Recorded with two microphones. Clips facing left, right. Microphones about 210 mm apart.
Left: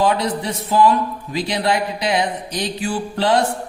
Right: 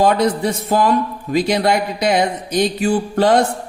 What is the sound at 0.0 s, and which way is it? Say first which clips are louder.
Speech: right 4 dB; 45° right (ahead or behind).